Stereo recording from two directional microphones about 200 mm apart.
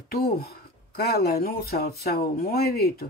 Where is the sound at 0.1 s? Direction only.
50° left (ahead or behind).